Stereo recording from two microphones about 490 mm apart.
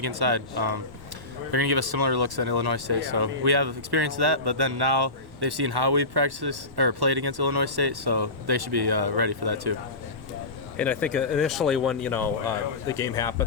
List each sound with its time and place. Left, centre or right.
0.0 s speech: right
10.8 s speech: centre